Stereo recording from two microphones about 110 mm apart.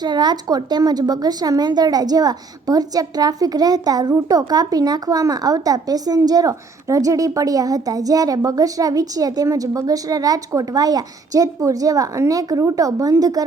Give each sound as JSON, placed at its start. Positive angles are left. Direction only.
{"t": 0.0, "sound": "a woman's voice", "side_deg": -40}